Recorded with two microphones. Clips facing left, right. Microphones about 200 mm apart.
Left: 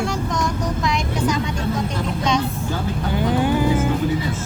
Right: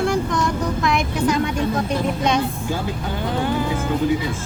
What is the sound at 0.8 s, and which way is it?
Speech, 55° right (ahead or behind).